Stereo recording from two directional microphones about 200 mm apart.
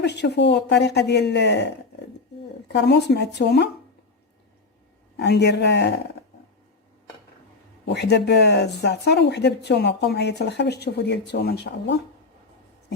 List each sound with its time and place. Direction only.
0.0 s speech: 60° left (ahead or behind)
5.1 s speech: 55° left (ahead or behind)
7.9 s speech: 55° left (ahead or behind)